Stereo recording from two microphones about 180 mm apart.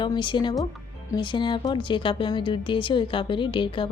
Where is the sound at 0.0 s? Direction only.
25° left (ahead or behind).